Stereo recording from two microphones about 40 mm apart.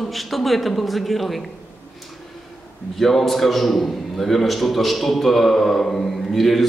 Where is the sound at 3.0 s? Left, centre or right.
Centre.